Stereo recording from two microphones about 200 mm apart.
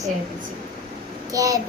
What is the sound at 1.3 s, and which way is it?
Speech, 15° right (ahead or behind).